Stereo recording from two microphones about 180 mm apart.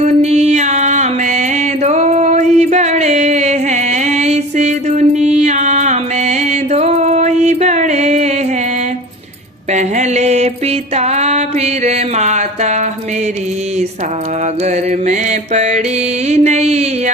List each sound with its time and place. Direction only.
0.0 s music: 40° right (ahead or behind)
9.7 s mantra: 40° right (ahead or behind)
14.6 s music: 40° right (ahead or behind)